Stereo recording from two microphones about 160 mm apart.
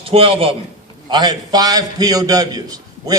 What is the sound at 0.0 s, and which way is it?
A man's voice, 35° right (ahead or behind).